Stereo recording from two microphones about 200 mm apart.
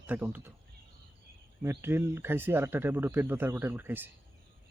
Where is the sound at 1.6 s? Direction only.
15° right (ahead or behind).